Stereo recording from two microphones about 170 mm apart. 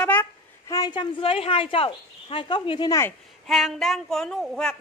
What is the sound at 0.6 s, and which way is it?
A woman's voice, 20° left (ahead or behind).